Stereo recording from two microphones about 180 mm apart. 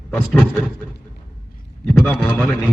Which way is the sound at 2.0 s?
10° left (ahead or behind).